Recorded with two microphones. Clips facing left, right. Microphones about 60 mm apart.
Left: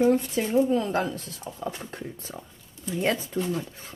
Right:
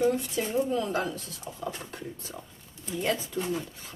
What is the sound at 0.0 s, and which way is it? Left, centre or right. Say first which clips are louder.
Speech: left 4 dB; left.